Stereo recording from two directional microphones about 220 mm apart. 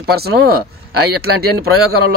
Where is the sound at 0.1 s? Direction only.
45° right (ahead or behind).